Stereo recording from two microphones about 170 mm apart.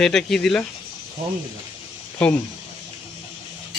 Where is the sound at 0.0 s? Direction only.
5° left (ahead or behind).